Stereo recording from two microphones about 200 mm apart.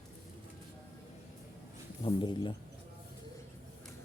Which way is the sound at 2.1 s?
25° left (ahead or behind).